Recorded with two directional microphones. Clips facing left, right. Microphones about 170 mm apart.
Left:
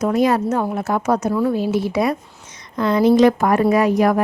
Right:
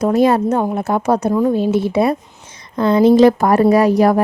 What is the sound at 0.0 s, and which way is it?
A woman's voice, 30° right (ahead or behind).